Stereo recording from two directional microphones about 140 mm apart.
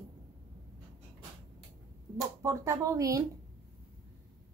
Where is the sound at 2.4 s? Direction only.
20° right (ahead or behind).